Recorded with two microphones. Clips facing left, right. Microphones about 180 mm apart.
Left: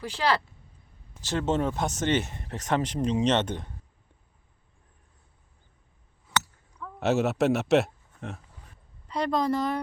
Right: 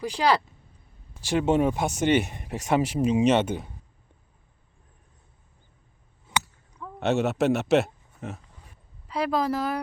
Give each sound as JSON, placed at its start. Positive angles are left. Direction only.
{"t": 0.0, "sound": "speech", "side_deg": -15}
{"t": 6.3, "sound": "chink", "side_deg": -20}
{"t": 7.0, "sound": "speech", "side_deg": 0}